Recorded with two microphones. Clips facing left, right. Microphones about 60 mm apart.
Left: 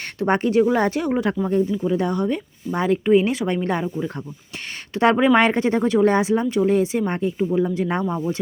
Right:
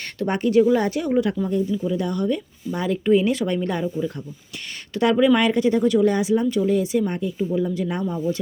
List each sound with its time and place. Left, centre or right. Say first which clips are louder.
0.2 s speech: even; left